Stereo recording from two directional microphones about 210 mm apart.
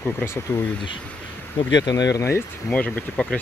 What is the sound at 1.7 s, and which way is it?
Speech, 20° left (ahead or behind).